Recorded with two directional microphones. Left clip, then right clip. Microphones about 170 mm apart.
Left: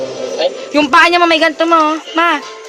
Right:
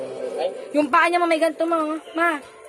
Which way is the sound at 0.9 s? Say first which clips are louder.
Left 10 dB; 20° left (ahead or behind).